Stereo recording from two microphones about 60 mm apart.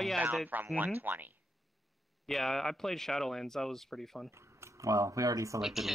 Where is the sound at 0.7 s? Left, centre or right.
Right.